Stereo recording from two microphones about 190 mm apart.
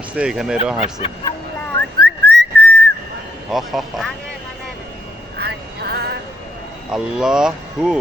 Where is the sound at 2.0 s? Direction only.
55° right (ahead or behind).